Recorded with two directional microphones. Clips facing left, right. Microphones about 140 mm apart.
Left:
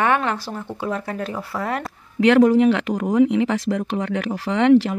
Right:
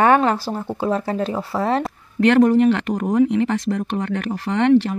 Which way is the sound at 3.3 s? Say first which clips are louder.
Even; 5° left (ahead or behind).